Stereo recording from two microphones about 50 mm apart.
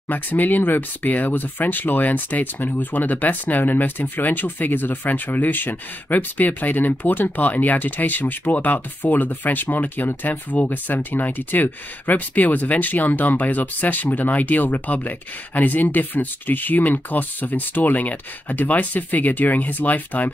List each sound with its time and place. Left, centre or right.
0.1 s speech: left